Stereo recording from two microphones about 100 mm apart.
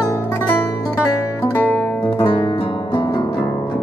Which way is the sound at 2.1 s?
60° left (ahead or behind).